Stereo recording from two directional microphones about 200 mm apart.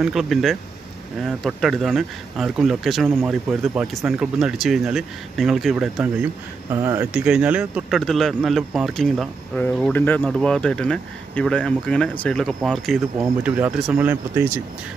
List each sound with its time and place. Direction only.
0.0 s speech: centre (ahead or behind)
6.7 s speech: 10° right (ahead or behind)